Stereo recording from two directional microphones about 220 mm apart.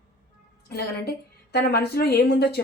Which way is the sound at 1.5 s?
45° left (ahead or behind).